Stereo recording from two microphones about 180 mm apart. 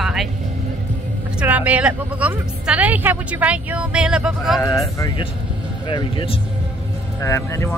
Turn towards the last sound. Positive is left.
turn(degrees=15)  # may be behind; listen again after turning